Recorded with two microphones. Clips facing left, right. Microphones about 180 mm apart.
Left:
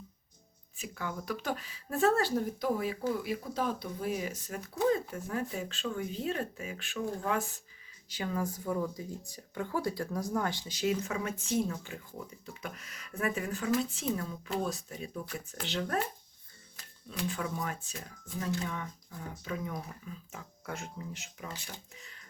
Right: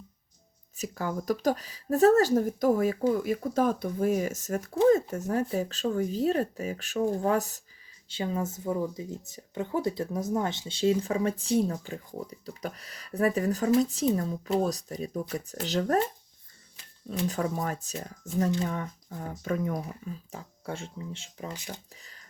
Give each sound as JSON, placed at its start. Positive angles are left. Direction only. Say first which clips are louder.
{"t": 0.8, "sound": "speech", "louder": "right 7 dB", "side_deg": -40}
{"t": 8.0, "sound": "speech", "louder": "right 3 dB", "side_deg": -25}
{"t": 17.2, "sound": "speech", "louder": "right 5 dB", "side_deg": -40}
{"t": 20.3, "sound": "speech", "louder": "right 2 dB", "side_deg": -30}